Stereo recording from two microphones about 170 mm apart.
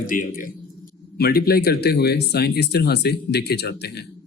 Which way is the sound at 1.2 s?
65° left (ahead or behind).